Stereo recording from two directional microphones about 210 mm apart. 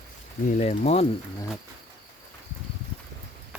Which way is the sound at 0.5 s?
35° left (ahead or behind).